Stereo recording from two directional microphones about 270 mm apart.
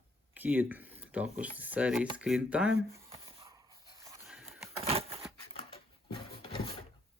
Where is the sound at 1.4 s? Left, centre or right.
Centre.